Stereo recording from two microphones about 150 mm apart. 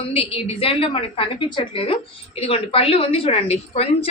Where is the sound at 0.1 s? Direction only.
40° left (ahead or behind).